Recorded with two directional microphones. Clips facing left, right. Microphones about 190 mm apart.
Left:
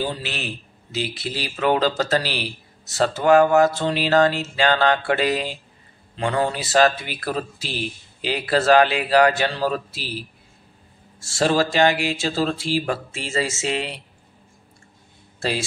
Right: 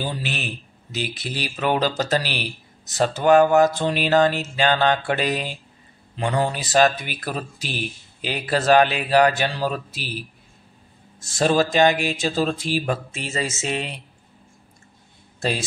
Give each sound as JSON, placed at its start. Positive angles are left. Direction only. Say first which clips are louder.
{"t": 0.2, "sound": "a man's voice", "louder": "right 1 dB", "side_deg": -15}
{"t": 11.1, "sound": "a man's voice", "louder": "even", "side_deg": -20}